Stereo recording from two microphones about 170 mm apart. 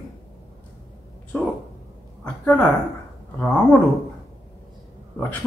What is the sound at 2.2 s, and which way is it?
Speech, 10° left (ahead or behind).